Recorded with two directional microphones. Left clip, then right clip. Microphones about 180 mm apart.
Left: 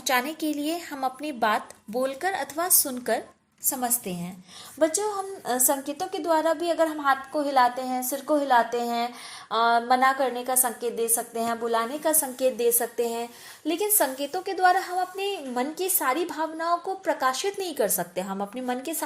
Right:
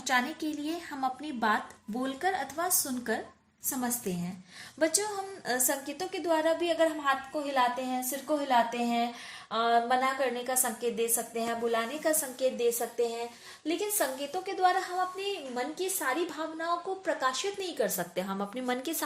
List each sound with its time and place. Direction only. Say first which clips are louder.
0.0 s speech: left 4 dB; 55° left (ahead or behind)
4.8 s a woman's voice: left 5 dB; 15° left (ahead or behind)
5.5 s a woman's voice: left 5 dB; 25° left (ahead or behind)
10.0 s a woman's voice: left 7 dB; 35° left (ahead or behind)
18.0 s a woman's voice: left 4 dB; 20° left (ahead or behind)